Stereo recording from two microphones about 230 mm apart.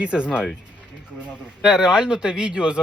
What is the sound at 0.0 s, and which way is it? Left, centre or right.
Speech, centre.